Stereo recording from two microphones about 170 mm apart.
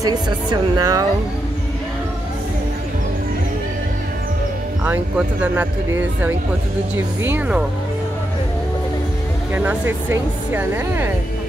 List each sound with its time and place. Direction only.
0.0 s a woman's voice: 25° right (ahead or behind)
4.8 s speech: 10° right (ahead or behind)
9.5 s speech: 10° right (ahead or behind)